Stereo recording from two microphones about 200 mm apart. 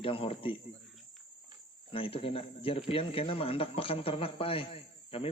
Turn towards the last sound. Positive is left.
turn(degrees=30)  # may be behind; listen again after turning